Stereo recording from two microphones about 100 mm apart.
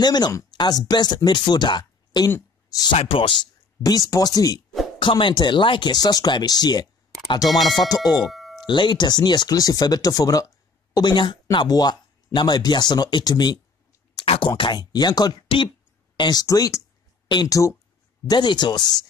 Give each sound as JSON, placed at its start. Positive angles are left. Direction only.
{"t": 0.0, "sound": "speech", "side_deg": 45}
{"t": 0.3, "sound": "a sound", "side_deg": 35}
{"t": 0.6, "sound": "speech", "side_deg": 45}
{"t": 3.0, "sound": "speech", "side_deg": 60}
{"t": 4.1, "sound": "speech", "side_deg": 40}
{"t": 4.9, "sound": "speech", "side_deg": 55}
{"t": 8.2, "sound": "doorbell", "side_deg": 0}
{"t": 8.5, "sound": "speech", "side_deg": 50}
{"t": 14.2, "sound": "speech", "side_deg": 75}
{"t": 14.6, "sound": "speech", "side_deg": 45}
{"t": 16.2, "sound": "speech", "side_deg": 40}
{"t": 18.2, "sound": "speech", "side_deg": 45}